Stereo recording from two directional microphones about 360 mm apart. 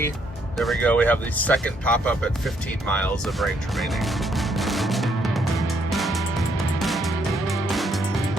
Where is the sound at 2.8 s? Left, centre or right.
Centre.